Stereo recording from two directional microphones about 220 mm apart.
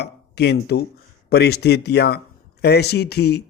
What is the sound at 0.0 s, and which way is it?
Speech, 50° left (ahead or behind).